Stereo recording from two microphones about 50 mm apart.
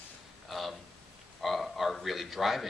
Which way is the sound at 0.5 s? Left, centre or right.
Centre.